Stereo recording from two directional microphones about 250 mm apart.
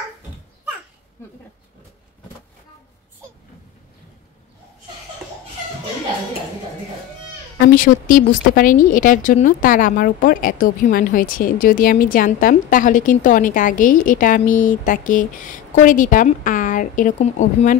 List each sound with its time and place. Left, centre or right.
7.6 s speech: left